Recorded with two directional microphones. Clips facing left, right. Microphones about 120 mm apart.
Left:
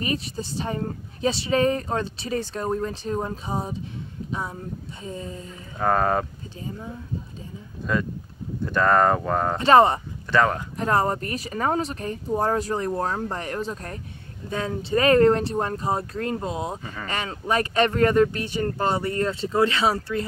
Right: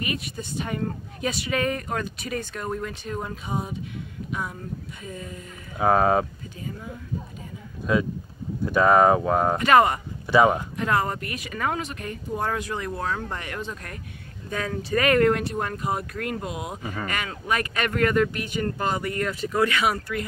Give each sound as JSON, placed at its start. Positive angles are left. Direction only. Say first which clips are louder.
{"t": 0.0, "sound": "speech", "louder": "left 3 dB", "side_deg": 30}
{"t": 5.8, "sound": "speech", "louder": "right 2 dB", "side_deg": -5}
{"t": 7.8, "sound": "speech", "louder": "right 2 dB", "side_deg": -5}
{"t": 9.6, "sound": "speech", "louder": "left 4 dB", "side_deg": 30}
{"t": 10.2, "sound": "speech", "louder": "right 3 dB", "side_deg": -15}
{"t": 10.8, "sound": "speech", "louder": "left 7 dB", "side_deg": 35}
{"t": 16.8, "sound": "speech", "louder": "right 4 dB", "side_deg": -15}
{"t": 17.1, "sound": "speech", "louder": "left 4 dB", "side_deg": 30}